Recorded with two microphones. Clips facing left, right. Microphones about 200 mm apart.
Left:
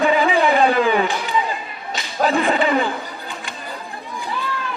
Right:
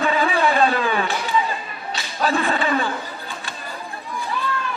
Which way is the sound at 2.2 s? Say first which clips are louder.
Left 4 dB; 15° left (ahead or behind).